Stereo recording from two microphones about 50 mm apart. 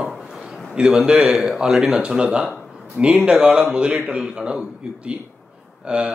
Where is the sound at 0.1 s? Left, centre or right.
Centre.